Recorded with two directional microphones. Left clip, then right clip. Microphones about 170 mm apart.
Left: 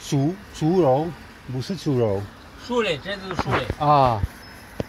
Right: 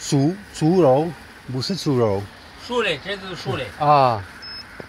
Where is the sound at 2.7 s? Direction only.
15° left (ahead or behind).